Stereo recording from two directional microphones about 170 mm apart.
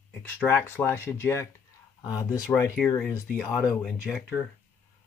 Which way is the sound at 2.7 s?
5° left (ahead or behind).